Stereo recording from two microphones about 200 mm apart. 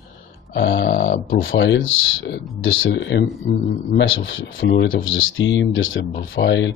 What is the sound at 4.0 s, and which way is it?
Speech, 75° left (ahead or behind).